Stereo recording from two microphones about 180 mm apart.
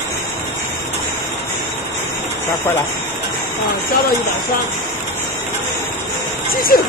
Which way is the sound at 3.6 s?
60° left (ahead or behind).